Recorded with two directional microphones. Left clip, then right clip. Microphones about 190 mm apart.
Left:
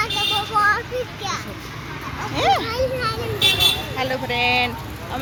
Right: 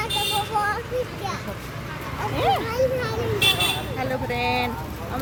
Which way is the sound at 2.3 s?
20° left (ahead or behind).